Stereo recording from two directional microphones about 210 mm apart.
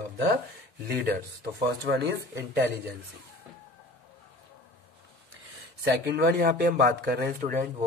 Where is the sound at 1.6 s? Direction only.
50° right (ahead or behind).